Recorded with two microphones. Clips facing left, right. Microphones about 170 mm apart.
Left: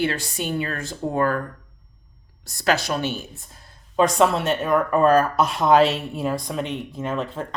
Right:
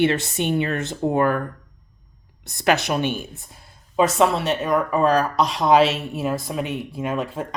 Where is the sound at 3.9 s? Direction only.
5° right (ahead or behind).